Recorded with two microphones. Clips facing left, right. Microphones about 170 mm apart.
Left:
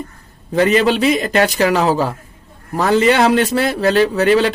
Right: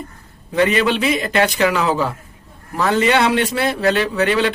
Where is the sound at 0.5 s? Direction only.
40° left (ahead or behind).